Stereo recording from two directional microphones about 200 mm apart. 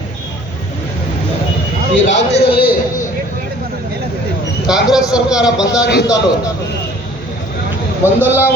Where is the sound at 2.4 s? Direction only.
50° left (ahead or behind).